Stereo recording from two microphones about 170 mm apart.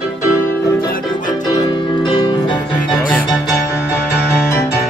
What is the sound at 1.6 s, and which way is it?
Keyboard, 25° left (ahead or behind).